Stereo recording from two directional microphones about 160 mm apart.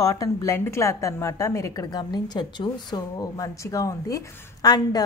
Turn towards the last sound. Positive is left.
turn(degrees=25)  # may be behind; listen again after turning